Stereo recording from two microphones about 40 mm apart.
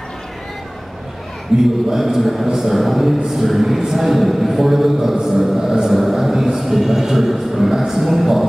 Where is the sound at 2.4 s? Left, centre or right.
Centre.